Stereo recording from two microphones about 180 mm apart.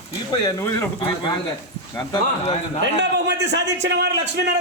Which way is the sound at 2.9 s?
70° right (ahead or behind).